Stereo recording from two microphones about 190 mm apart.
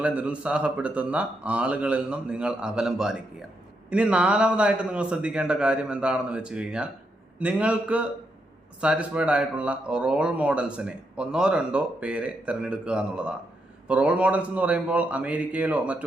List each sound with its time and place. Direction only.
0.0 s a man's voice: 5° right (ahead or behind)